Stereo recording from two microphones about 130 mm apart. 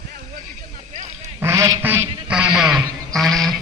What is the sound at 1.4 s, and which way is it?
Duck, 20° right (ahead or behind).